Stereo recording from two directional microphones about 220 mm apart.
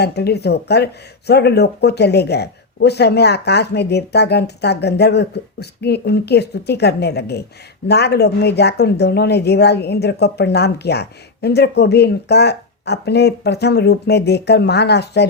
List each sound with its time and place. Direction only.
0.0 s speech: 50° left (ahead or behind)